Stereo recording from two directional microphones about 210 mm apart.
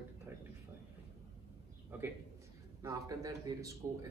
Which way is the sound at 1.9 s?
10° right (ahead or behind).